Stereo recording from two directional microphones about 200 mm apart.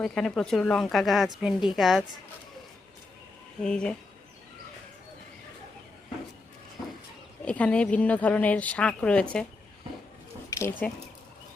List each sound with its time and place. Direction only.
0.0 s a woman's voice: 5° left (ahead or behind)
3.6 s a woman's voice: 5° left (ahead or behind)
7.4 s a woman's voice: 5° left (ahead or behind)
10.6 s a woman's voice: 10° left (ahead or behind)